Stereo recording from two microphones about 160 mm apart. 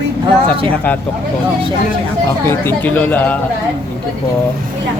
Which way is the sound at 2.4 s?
15° left (ahead or behind).